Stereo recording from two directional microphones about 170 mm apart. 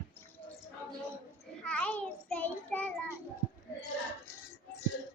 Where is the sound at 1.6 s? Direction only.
5° left (ahead or behind).